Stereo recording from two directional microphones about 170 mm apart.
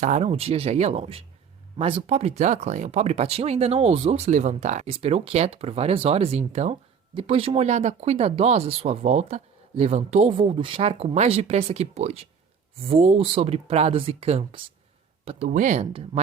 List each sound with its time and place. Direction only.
0.0 s speech: 40° right (ahead or behind)